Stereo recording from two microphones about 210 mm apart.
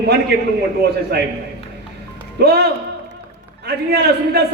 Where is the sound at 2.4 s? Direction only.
50° right (ahead or behind).